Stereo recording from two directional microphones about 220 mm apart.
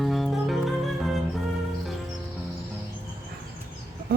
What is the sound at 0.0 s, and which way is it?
Music, centre (ahead or behind).